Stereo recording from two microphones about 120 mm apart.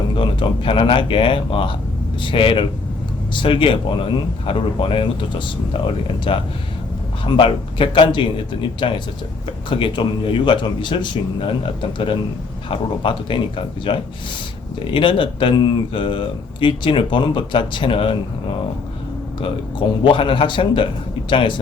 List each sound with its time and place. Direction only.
0.2 s speech: 45° left (ahead or behind)
6.3 s speech: 45° left (ahead or behind)
20.1 s speech: 45° left (ahead or behind)